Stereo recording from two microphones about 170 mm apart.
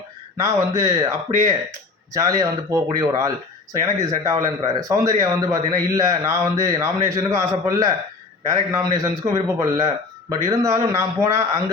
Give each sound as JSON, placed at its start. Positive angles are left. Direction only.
{"t": 0.3, "sound": "a man's voice", "side_deg": -20}